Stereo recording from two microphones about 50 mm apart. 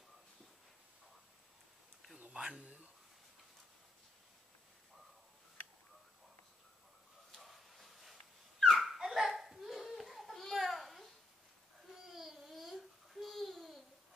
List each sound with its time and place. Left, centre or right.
2.1 s a sound: right
7.3 s dog: centre
8.9 s babbling: centre